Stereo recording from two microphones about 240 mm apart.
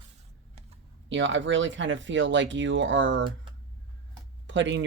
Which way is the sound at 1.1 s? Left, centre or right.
Right.